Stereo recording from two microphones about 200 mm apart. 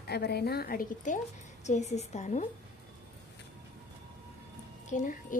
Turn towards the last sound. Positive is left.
turn(degrees=40)  # may be behind; listen again after turning